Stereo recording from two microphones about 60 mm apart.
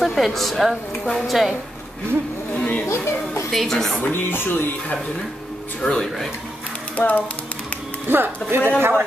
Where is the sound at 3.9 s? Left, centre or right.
Left.